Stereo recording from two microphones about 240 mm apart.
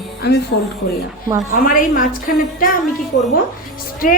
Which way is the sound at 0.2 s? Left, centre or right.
Left.